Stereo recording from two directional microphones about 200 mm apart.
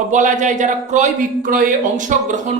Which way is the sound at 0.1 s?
40° right (ahead or behind).